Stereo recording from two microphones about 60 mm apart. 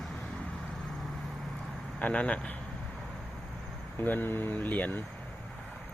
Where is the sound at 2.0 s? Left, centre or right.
Centre.